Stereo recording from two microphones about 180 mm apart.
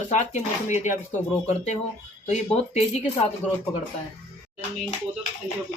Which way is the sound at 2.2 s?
40° left (ahead or behind).